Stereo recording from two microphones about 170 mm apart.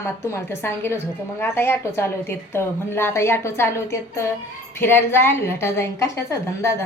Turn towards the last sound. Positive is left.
turn(degrees=15)  # may be behind; listen again after turning